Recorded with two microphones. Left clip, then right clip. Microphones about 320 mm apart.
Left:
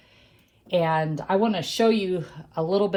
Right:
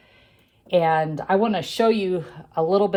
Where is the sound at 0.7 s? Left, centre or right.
Right.